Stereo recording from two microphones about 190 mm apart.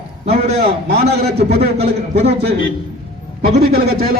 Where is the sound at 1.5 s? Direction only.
60° right (ahead or behind).